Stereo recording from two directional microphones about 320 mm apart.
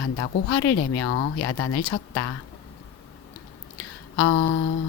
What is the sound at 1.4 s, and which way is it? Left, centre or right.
Speech, left.